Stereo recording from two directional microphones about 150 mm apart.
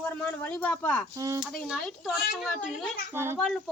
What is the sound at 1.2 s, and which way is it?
Speech, 20° right (ahead or behind).